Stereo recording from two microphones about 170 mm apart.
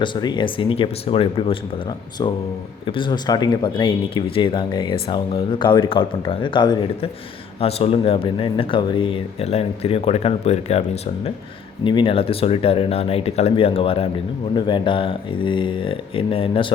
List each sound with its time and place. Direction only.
0.0 s speech: 25° left (ahead or behind)